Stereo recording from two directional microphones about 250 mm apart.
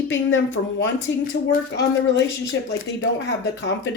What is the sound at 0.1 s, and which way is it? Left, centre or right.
Speech, left.